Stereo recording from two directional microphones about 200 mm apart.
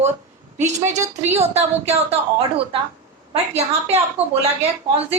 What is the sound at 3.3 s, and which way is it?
Speech, 30° right (ahead or behind).